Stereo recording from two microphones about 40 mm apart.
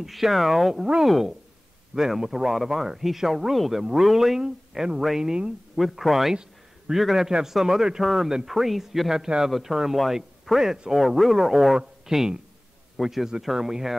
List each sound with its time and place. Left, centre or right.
0.0 s speech: centre
5.8 s a man's voice: centre